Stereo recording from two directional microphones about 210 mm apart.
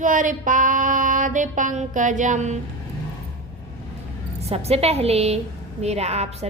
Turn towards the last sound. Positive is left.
turn(degrees=-30)  # may be behind; listen again after turning